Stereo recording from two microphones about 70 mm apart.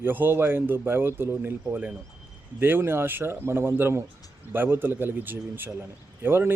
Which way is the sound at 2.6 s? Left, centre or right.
Right.